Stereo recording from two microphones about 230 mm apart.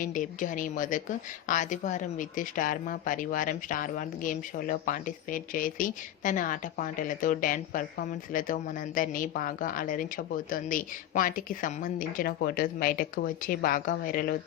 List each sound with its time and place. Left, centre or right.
0.0 s a woman's voice: left